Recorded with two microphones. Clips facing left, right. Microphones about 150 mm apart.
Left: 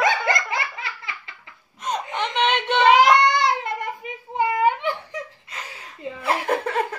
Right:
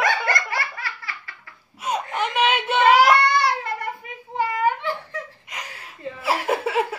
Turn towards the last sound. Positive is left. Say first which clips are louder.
# right 1 dB
turn(degrees=-5)  # may be behind; listen again after turning